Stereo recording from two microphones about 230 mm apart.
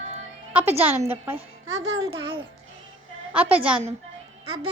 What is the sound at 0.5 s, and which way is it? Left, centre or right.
Speech, centre.